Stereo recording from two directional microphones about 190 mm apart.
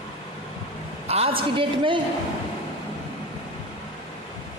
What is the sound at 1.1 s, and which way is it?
Speech, 30° right (ahead or behind).